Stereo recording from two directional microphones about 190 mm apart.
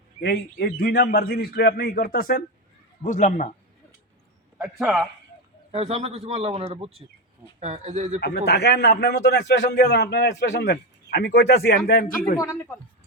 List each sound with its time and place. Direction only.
0.2 s a man's voice: 55° left (ahead or behind); by 3.5 s 40° left (ahead or behind)
4.5 s a man's voice: 5° right (ahead or behind)
5.7 s a man's voice: 35° right (ahead or behind)
8.2 s a man's voice: 60° left (ahead or behind)
12.4 s speech: 15° left (ahead or behind)